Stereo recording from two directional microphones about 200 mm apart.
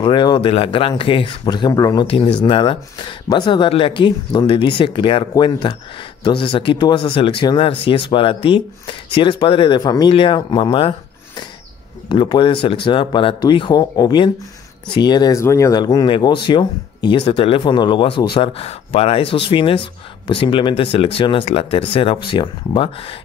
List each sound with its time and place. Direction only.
0.0 s speech: 25° left (ahead or behind)
12.1 s speech: 25° left (ahead or behind)